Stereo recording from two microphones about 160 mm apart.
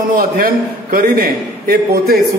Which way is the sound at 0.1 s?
65° right (ahead or behind).